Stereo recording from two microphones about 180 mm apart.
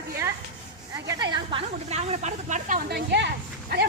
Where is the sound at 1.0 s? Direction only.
20° right (ahead or behind); by 3.3 s 70° right (ahead or behind).